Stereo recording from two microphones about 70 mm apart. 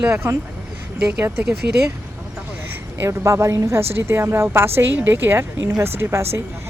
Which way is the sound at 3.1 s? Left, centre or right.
Right.